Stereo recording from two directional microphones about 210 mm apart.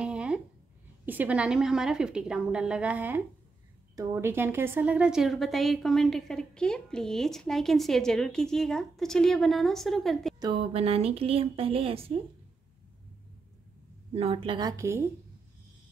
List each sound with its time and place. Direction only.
0.0 s a sound: 5° right (ahead or behind)
1.0 s a woman's voice: 10° right (ahead or behind)
10.4 s speech: 25° right (ahead or behind)
14.1 s speech: 25° right (ahead or behind)